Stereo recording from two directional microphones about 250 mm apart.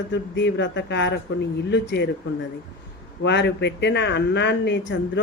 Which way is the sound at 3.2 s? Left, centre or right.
Left.